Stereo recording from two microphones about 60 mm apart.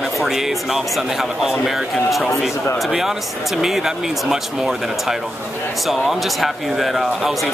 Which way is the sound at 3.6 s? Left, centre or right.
Centre.